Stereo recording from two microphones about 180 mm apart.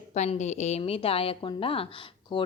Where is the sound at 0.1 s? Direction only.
40° left (ahead or behind).